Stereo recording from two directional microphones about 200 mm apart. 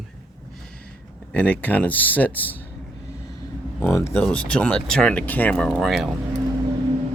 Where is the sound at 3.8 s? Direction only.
15° left (ahead or behind).